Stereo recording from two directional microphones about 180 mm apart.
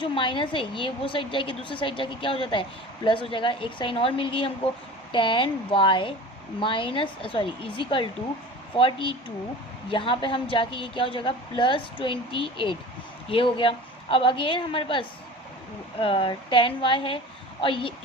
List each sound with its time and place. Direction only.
0.0 s a woman's voice: 25° left (ahead or behind)